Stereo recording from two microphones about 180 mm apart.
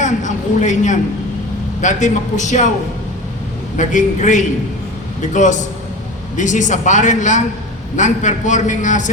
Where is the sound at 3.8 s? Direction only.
45° left (ahead or behind).